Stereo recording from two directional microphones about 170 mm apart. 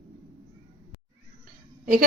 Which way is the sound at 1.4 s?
55° right (ahead or behind).